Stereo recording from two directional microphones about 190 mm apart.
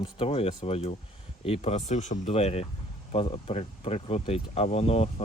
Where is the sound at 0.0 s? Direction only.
30° left (ahead or behind).